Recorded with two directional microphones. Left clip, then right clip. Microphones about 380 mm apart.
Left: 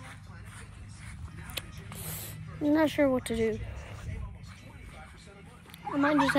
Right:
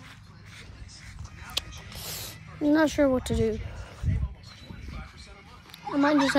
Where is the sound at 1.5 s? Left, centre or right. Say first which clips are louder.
Right 7 dB; centre.